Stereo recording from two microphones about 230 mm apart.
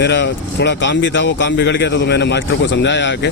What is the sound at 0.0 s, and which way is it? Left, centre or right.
Speech, left.